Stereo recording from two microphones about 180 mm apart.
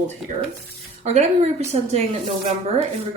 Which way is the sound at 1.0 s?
40° right (ahead or behind).